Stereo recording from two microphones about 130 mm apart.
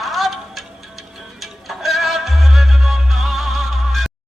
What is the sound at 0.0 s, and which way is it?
Music, centre (ahead or behind).